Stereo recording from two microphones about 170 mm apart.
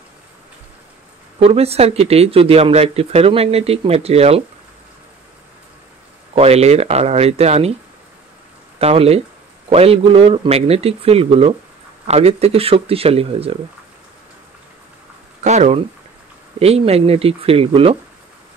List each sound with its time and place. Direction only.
1.4 s speech: 35° right (ahead or behind)
6.3 s speech: 40° right (ahead or behind)
8.7 s speech: 35° right (ahead or behind)
15.4 s speech: 40° right (ahead or behind)